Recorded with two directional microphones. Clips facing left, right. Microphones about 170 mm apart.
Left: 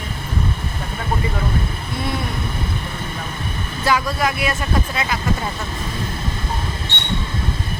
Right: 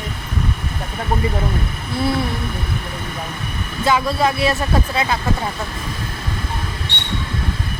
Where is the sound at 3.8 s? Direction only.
25° right (ahead or behind).